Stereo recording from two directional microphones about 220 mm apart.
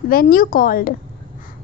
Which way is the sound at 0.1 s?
40° left (ahead or behind).